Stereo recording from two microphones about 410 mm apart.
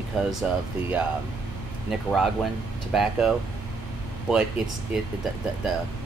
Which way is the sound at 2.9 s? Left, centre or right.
Centre.